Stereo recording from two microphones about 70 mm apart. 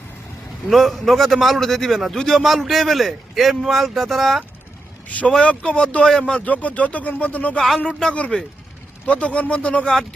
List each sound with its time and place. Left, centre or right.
0.7 s a man's voice: centre
5.0 s speech: left